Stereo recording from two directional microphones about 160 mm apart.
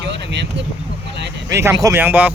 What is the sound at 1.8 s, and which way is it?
Speech, 15° right (ahead or behind).